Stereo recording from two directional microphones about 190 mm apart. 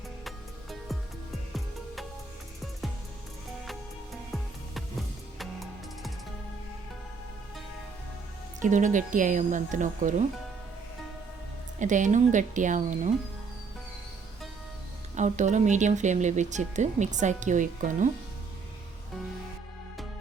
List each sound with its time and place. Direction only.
0.3 s music: centre (ahead or behind)
4.3 s music: centre (ahead or behind)
8.6 s speech: 40° right (ahead or behind)
11.8 s speech: 40° right (ahead or behind)
15.1 s speech: 40° right (ahead or behind)